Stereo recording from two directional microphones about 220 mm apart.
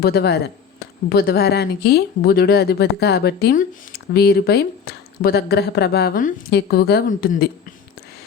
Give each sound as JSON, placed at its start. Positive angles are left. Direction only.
{"t": 0.0, "sound": "speech", "side_deg": 45}